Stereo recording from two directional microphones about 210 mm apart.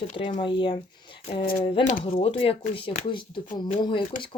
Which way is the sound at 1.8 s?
25° left (ahead or behind).